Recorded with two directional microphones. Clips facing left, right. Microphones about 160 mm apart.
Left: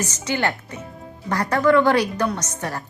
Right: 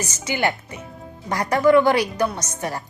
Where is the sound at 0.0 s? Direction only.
10° right (ahead or behind).